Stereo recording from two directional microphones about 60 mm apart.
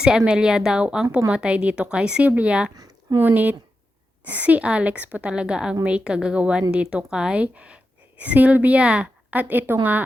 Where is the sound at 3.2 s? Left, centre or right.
Right.